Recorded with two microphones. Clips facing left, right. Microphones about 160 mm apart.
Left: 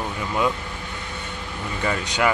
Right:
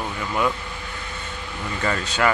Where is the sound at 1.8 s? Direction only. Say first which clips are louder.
Even; 15° left (ahead or behind).